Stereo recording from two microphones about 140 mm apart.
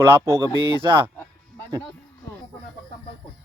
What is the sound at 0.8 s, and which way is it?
Speech, 35° right (ahead or behind).